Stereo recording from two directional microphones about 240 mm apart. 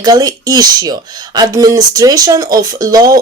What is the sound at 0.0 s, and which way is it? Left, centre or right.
Speech, centre.